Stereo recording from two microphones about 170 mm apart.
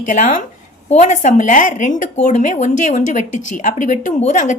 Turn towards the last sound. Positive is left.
turn(degrees=45)  # may be behind; listen again after turning